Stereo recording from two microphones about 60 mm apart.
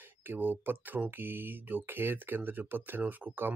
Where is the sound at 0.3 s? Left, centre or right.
Right.